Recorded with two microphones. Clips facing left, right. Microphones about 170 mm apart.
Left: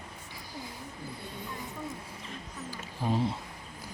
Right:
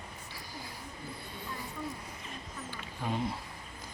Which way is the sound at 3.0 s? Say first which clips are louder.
Left 4 dB; 25° left (ahead or behind).